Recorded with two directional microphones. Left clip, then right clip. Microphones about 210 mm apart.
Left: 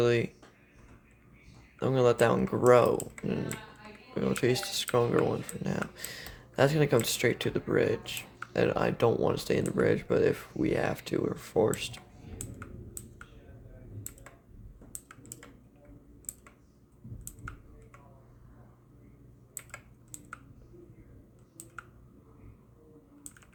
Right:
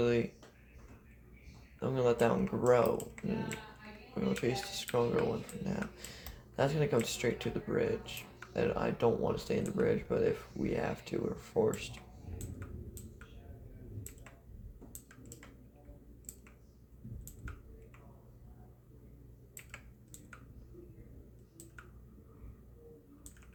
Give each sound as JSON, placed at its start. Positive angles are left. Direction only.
{"t": 0.0, "sound": "speech", "side_deg": 55}
{"t": 1.8, "sound": "speech", "side_deg": 55}
{"t": 4.1, "sound": "speech", "side_deg": 50}